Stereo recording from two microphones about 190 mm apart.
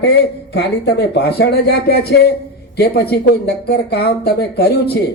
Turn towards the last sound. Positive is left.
turn(degrees=60)  # may be behind; listen again after turning